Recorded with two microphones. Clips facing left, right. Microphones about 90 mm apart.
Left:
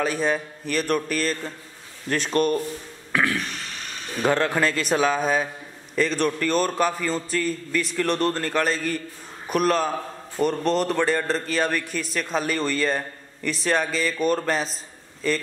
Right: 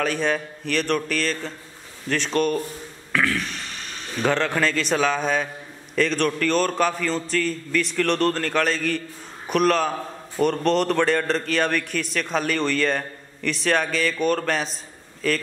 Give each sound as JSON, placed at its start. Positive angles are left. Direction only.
{"t": 0.0, "sound": "a man's voice", "side_deg": 5}
{"t": 3.1, "sound": "a sound", "side_deg": 15}
{"t": 4.2, "sound": "a man's voice", "side_deg": 10}